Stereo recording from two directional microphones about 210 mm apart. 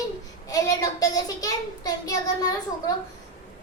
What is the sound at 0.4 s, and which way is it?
A child's voice, 15° left (ahead or behind).